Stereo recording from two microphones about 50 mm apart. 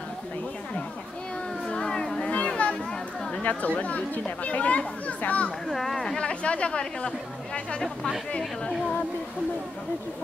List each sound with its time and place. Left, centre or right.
1.7 s music: centre
3.4 s speech: left
5.7 s speech: centre
6.1 s speech: left